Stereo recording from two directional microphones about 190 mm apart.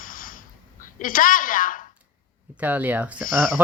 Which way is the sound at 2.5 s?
10° right (ahead or behind).